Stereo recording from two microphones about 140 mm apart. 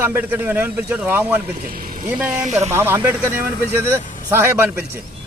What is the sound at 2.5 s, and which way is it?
Speech, 50° right (ahead or behind).